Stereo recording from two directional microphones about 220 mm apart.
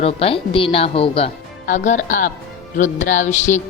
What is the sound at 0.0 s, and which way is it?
A woman's voice, 25° left (ahead or behind).